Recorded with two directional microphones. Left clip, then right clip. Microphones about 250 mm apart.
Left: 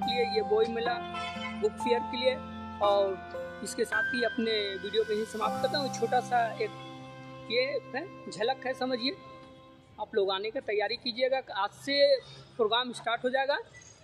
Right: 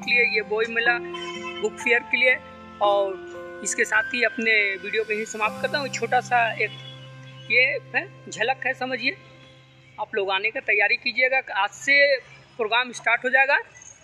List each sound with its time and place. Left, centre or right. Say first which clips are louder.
0.0 s speech: right 8 dB; centre